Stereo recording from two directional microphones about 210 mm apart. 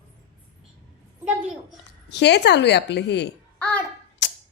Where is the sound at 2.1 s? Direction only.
55° left (ahead or behind).